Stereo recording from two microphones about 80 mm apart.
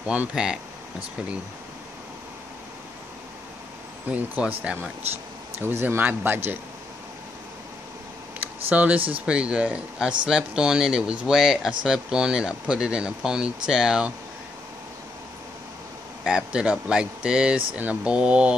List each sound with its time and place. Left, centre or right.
0.0 s speech: centre
4.1 s speech: centre
8.6 s speech: centre
16.3 s speech: centre